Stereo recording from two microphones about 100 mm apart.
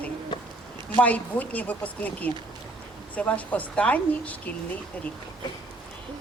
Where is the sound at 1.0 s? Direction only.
15° left (ahead or behind).